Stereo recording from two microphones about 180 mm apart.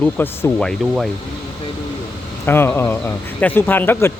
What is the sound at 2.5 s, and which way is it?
A man's voice, 10° left (ahead or behind).